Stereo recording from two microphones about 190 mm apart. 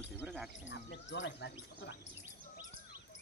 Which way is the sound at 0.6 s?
70° left (ahead or behind).